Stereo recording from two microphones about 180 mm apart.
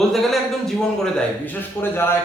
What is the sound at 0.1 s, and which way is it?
Speech, centre (ahead or behind).